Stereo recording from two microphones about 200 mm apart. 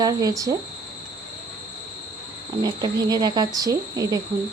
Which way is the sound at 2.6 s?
20° right (ahead or behind).